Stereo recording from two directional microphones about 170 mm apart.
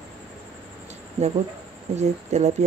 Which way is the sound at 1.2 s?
40° right (ahead or behind).